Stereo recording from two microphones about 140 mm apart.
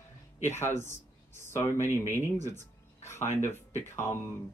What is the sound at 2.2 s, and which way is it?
Speech, 20° left (ahead or behind).